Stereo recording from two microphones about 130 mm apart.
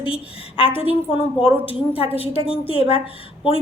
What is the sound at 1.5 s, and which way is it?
Speech, 15° right (ahead or behind).